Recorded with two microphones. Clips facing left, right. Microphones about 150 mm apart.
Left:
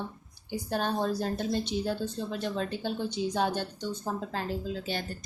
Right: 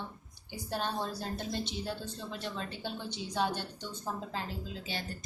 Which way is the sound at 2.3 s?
50° left (ahead or behind).